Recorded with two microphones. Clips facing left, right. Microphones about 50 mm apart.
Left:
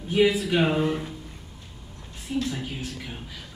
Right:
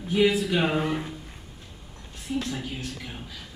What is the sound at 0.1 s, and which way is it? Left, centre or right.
Speech, centre.